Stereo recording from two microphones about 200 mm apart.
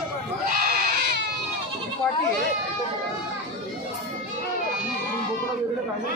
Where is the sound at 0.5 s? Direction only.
50° right (ahead or behind).